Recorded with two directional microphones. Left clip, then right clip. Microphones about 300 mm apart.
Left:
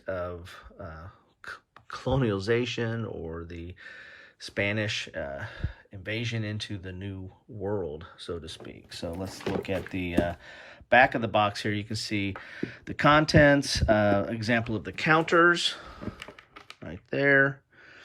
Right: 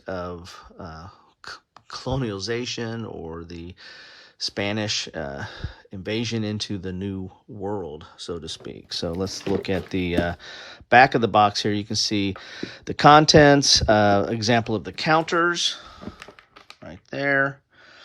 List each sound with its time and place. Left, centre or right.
0.0 s speech: centre
7.6 s speech: centre